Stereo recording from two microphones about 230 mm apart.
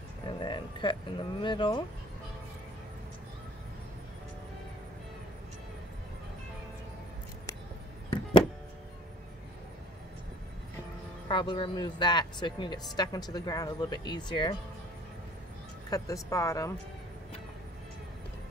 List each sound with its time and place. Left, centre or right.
0.4 s speech: centre
11.2 s speech: left
15.9 s speech: centre